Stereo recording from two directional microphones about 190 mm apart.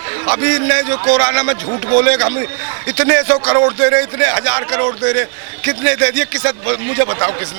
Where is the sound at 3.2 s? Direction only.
25° right (ahead or behind).